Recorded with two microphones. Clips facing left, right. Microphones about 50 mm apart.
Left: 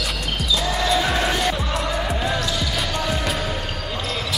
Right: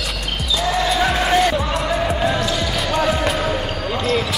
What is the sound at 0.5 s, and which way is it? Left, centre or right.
Basketball bounce, centre.